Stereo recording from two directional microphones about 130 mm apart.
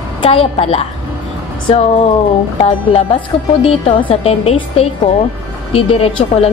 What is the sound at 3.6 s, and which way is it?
A woman's voice, 45° left (ahead or behind).